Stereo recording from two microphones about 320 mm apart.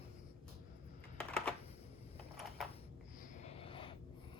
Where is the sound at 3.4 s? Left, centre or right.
Centre.